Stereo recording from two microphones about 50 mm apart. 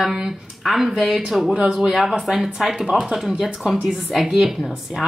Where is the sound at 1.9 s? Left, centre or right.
Centre.